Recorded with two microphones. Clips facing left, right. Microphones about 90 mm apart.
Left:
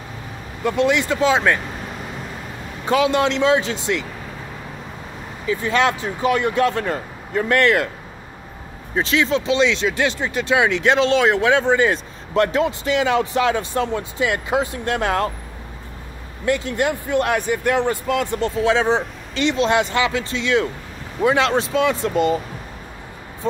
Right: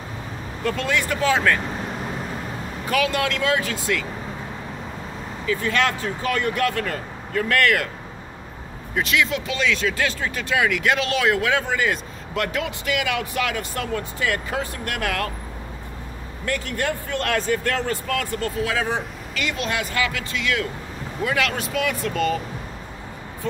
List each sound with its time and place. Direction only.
0.7 s speech: 20° left (ahead or behind)
2.8 s speech: 25° left (ahead or behind)
5.5 s speech: 20° left (ahead or behind)
8.9 s speech: 30° left (ahead or behind)
16.4 s speech: 20° left (ahead or behind)